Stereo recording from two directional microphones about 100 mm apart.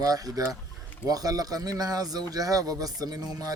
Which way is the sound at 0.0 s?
40° right (ahead or behind).